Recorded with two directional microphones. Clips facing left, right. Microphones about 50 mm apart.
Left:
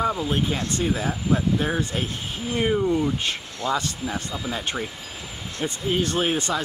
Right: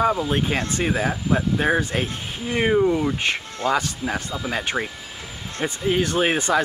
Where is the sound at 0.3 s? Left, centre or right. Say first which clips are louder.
Right 2 dB; right.